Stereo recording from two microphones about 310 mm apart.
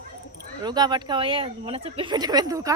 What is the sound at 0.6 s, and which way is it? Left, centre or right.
A woman's voice, centre.